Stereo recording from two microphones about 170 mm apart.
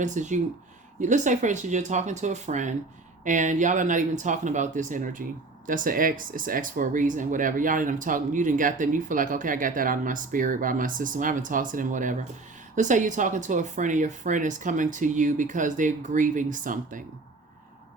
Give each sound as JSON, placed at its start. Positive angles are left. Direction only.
{"t": 0.0, "sound": "speech", "side_deg": -45}